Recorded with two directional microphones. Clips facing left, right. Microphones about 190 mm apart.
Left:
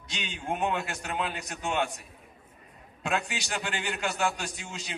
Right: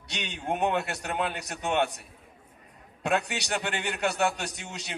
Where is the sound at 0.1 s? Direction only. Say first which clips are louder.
Right 2 dB; 65° right (ahead or behind).